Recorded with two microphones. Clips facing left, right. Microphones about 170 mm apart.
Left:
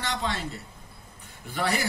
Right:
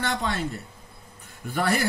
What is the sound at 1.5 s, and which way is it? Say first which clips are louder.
Speech: right 3 dB; 50° right (ahead or behind).